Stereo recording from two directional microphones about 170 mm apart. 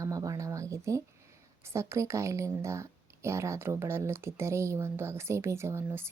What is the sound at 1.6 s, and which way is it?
Speech, 15° right (ahead or behind).